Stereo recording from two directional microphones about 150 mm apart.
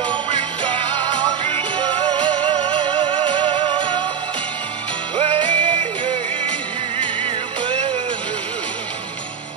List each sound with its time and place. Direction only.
0.0 s music: 35° right (ahead or behind)
5.1 s music: 35° right (ahead or behind)